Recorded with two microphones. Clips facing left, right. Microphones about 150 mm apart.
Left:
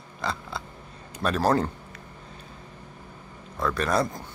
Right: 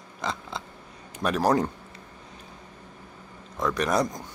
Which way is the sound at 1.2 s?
15° right (ahead or behind).